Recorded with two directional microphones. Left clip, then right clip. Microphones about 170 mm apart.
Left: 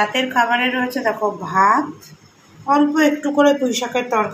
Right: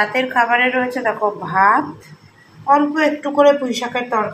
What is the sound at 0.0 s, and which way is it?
A woman's voice, centre (ahead or behind).